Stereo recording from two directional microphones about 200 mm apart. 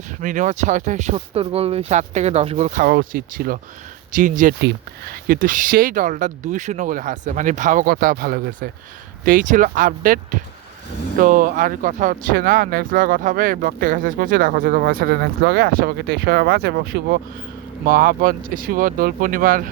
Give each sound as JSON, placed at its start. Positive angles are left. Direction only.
{"t": 0.2, "sound": "speech", "side_deg": -40}
{"t": 2.8, "sound": "speech", "side_deg": -45}
{"t": 4.6, "sound": "speech", "side_deg": -60}
{"t": 5.3, "sound": "speech", "side_deg": -45}